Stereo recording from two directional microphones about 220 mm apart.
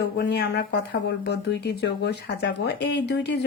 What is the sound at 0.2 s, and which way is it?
A woman's voice, 50° left (ahead or behind).